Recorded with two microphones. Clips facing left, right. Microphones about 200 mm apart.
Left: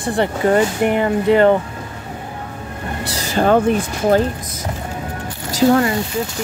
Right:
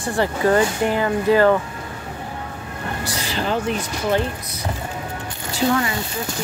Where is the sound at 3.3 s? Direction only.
50° left (ahead or behind).